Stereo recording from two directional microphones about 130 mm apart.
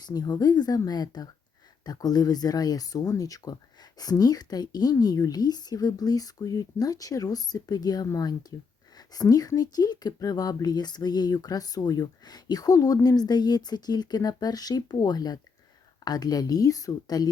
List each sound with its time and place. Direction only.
0.0 s a woman's voice: 30° left (ahead or behind)